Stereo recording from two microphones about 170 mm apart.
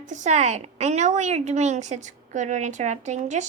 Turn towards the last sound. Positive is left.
turn(degrees=-45)  # may be behind; listen again after turning